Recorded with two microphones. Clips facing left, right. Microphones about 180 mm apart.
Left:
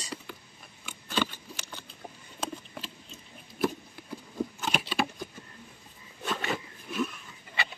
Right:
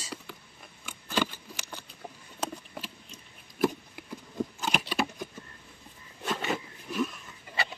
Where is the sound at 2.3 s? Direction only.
10° right (ahead or behind).